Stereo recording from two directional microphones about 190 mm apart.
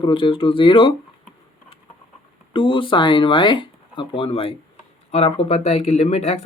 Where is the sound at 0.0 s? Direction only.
25° left (ahead or behind).